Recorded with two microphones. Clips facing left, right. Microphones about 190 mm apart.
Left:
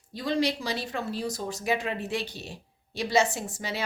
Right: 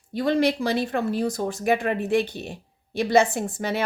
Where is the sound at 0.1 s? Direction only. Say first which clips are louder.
Right 6 dB; 60° right (ahead or behind).